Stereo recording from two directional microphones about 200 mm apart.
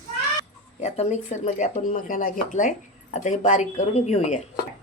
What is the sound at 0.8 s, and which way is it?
Speech, 35° left (ahead or behind).